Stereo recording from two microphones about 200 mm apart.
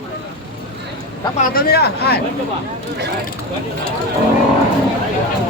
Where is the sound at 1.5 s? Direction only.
50° left (ahead or behind).